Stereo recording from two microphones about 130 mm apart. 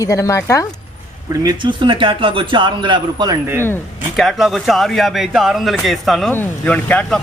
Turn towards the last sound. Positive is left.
turn(degrees=10)  # may be behind; listen again after turning